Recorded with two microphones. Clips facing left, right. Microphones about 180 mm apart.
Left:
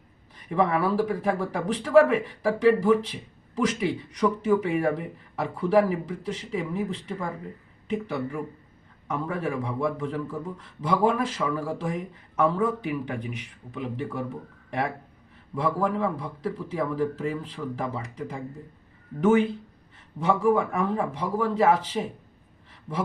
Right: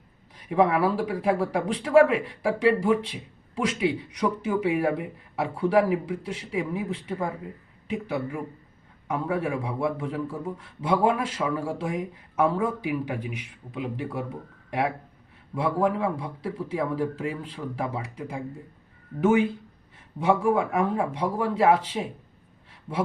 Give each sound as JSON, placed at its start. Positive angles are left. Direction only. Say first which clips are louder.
{"t": 0.3, "sound": "speech", "louder": "right 2 dB", "side_deg": -10}